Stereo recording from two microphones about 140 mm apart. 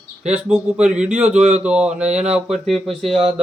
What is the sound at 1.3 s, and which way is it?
Speech, 50° right (ahead or behind).